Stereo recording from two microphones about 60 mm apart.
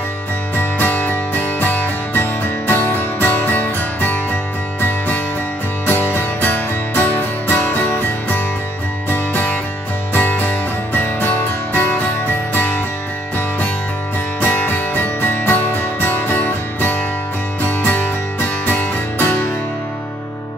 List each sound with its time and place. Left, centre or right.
0.6 s music: left
9.1 s music: left
12.5 s music: left
14.4 s music: left